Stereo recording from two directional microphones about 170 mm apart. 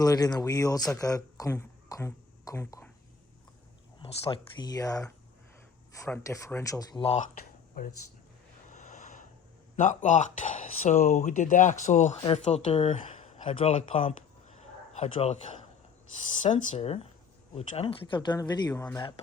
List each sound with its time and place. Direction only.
0.0 s speech: 20° left (ahead or behind)
4.0 s speech: 35° left (ahead or behind)
7.8 s speech: 60° left (ahead or behind)
8.7 s a sound: 45° left (ahead or behind)
9.7 s speech: 45° left (ahead or behind)
12.1 s speech: 25° left (ahead or behind)
12.5 s speech: 40° left (ahead or behind)
16.4 s speech: 40° left (ahead or behind); by 19.0 s 20° left (ahead or behind)